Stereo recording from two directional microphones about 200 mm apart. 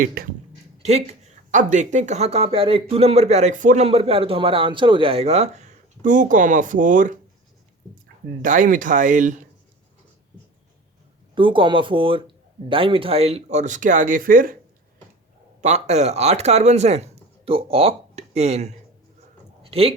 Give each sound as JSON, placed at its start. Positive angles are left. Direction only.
{"t": 0.0, "sound": "speech", "side_deg": -50}
{"t": 0.8, "sound": "speech", "side_deg": -35}
{"t": 8.4, "sound": "speech", "side_deg": -40}
{"t": 11.3, "sound": "speech", "side_deg": -25}
{"t": 15.6, "sound": "speech", "side_deg": -35}
{"t": 19.6, "sound": "a sound", "side_deg": -30}